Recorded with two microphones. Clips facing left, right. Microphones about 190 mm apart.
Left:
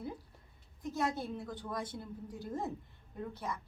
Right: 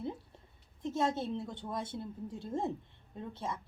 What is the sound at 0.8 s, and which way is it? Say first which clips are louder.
A woman's voice: right 3 dB; 25° right (ahead or behind).